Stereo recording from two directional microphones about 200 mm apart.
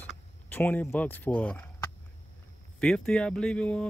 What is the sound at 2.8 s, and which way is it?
Speech, 5° left (ahead or behind).